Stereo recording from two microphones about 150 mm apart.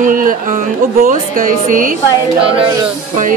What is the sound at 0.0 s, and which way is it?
A woman's voice, 65° right (ahead or behind).